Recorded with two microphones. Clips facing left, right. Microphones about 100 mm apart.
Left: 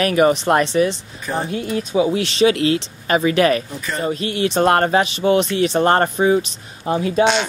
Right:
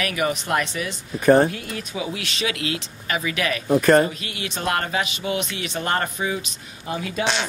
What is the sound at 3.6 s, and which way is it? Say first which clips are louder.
Speech: right 12 dB; 65° right (ahead or behind).